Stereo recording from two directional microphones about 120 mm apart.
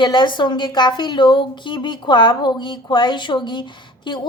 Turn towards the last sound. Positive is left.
turn(degrees=40)  # may be behind; listen again after turning